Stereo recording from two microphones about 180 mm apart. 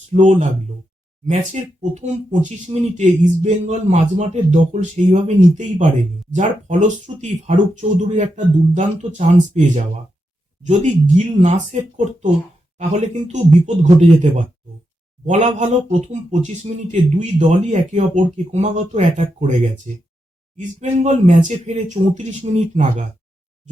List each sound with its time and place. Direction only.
0.1 s speech: 40° right (ahead or behind)
20.6 s speech: 40° right (ahead or behind)